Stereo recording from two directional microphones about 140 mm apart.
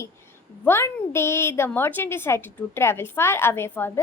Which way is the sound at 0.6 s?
15° left (ahead or behind).